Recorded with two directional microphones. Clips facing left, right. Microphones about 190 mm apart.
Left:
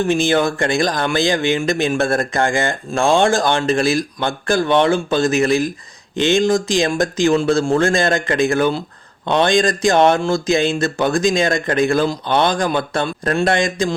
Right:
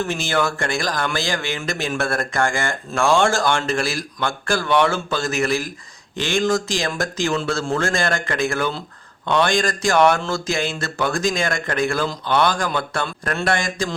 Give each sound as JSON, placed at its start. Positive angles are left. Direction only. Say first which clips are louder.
{"t": 0.0, "sound": "speech", "louder": "left 6 dB", "side_deg": 15}